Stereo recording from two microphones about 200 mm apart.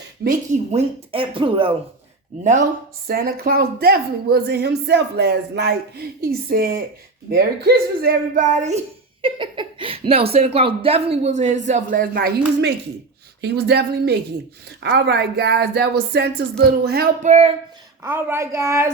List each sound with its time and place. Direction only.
0.3 s speech: 30° right (ahead or behind)
2.4 s speech: 40° right (ahead or behind)
3.1 s speech: 50° right (ahead or behind)
9.2 s speech: 25° right (ahead or behind); by 12.3 s 45° right (ahead or behind)
13.4 s a woman's voice: 55° right (ahead or behind)
17.2 s speech: 35° right (ahead or behind)
18.0 s speech: 10° right (ahead or behind)